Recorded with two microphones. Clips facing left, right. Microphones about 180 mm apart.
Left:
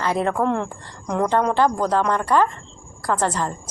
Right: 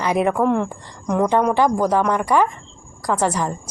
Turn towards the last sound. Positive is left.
turn(degrees=-10)  # may be behind; listen again after turning